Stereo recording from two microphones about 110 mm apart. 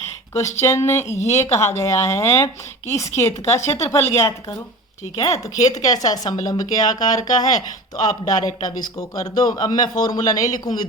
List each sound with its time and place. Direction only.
0.3 s speech: 25° left (ahead or behind)